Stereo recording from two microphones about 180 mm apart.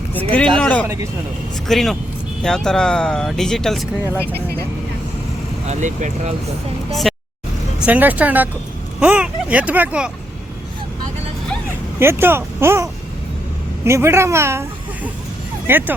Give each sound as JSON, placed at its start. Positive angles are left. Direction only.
{"t": 0.1, "sound": "speech", "side_deg": 10}
{"t": 5.6, "sound": "speech", "side_deg": -40}
{"t": 7.1, "sound": "vehicle", "side_deg": 0}
{"t": 7.8, "sound": "speech", "side_deg": -10}
{"t": 11.9, "sound": "speech", "side_deg": -10}
{"t": 15.6, "sound": "speech", "side_deg": -10}